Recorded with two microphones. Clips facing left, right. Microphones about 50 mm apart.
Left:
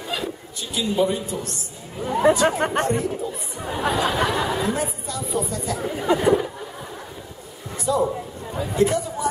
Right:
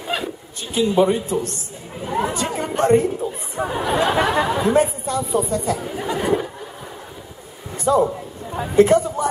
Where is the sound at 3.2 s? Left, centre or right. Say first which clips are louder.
Right 5 dB; right.